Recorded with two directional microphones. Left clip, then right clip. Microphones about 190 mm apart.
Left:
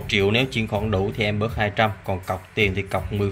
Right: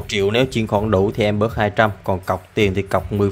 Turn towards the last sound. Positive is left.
turn(degrees=-35)  # may be behind; listen again after turning